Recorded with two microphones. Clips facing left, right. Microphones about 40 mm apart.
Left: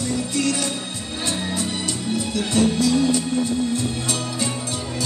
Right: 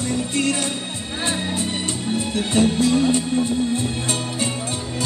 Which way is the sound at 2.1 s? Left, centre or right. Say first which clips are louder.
Right 1 dB; right.